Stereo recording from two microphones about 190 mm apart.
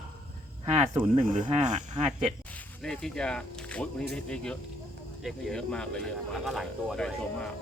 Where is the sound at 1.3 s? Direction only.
40° right (ahead or behind).